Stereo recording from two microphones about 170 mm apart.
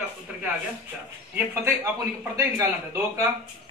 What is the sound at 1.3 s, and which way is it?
A man's voice, 10° right (ahead or behind).